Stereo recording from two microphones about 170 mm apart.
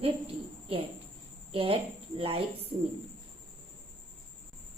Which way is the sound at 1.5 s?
35° right (ahead or behind).